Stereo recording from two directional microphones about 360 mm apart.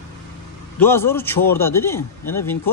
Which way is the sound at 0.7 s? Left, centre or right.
Centre.